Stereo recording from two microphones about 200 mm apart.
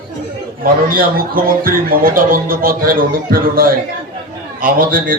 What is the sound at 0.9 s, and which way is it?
Speech, 45° right (ahead or behind).